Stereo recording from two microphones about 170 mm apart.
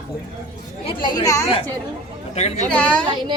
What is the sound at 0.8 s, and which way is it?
Speech, 30° left (ahead or behind).